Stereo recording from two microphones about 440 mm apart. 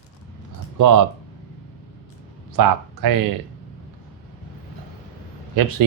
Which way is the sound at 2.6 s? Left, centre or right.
Right.